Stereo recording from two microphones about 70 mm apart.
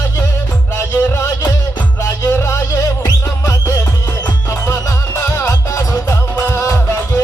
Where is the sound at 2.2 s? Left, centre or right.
Left.